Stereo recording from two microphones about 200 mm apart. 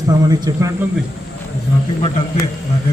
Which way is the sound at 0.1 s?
20° right (ahead or behind).